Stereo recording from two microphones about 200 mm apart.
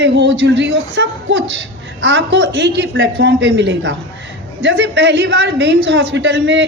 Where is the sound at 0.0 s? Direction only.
65° right (ahead or behind).